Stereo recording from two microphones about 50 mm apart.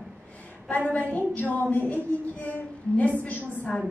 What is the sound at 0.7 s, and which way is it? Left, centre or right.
A woman's voice, left.